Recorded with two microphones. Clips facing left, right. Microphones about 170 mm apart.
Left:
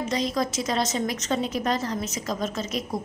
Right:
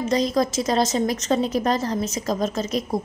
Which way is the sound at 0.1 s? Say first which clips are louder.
Right 7 dB; 40° right (ahead or behind).